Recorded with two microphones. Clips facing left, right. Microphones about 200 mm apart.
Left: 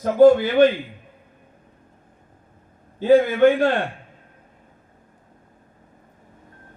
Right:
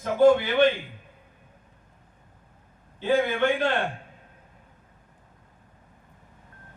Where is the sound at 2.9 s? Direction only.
40° left (ahead or behind).